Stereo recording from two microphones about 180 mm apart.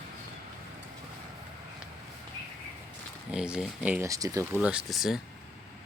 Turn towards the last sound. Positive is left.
turn(degrees=0)  # may be behind; listen again after turning